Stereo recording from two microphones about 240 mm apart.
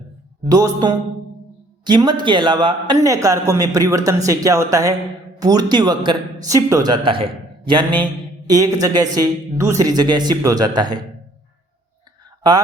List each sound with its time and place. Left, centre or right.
0.4 s a man's voice: centre
12.4 s speech: centre